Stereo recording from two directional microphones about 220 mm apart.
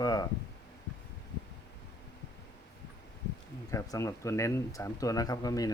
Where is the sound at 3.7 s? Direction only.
15° left (ahead or behind).